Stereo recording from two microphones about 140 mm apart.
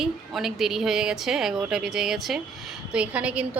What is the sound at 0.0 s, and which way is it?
A woman's voice, centre (ahead or behind).